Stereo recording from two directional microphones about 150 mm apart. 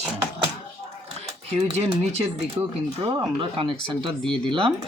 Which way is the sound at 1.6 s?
45° right (ahead or behind).